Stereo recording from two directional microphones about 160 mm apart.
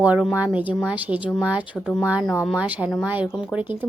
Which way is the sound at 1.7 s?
10° left (ahead or behind).